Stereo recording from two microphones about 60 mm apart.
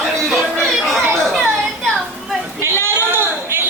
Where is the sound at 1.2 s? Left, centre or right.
Centre.